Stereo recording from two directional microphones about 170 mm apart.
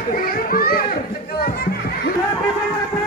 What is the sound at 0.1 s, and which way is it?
Children playing, 60° left (ahead or behind).